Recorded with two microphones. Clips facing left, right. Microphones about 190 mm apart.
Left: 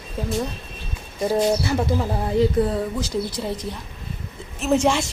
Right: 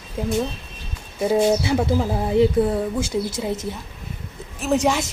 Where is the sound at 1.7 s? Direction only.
15° right (ahead or behind).